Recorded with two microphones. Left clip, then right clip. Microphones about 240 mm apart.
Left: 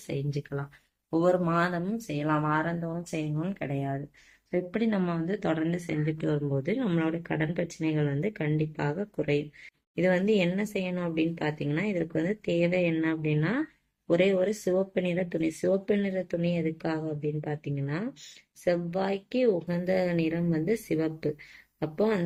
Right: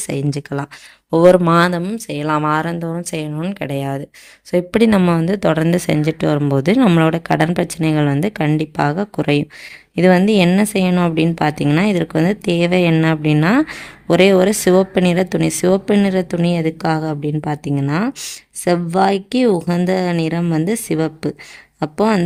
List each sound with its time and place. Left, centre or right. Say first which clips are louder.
0.1 s a woman's voice: right 11 dB; right
1.1 s a woman's voice: right 15 dB; right